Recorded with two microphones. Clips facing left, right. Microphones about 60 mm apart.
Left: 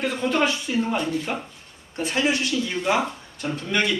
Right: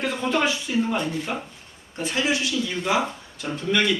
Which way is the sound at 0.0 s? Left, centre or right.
Centre.